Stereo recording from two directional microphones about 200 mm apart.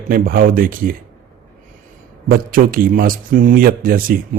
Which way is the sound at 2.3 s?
45° right (ahead or behind).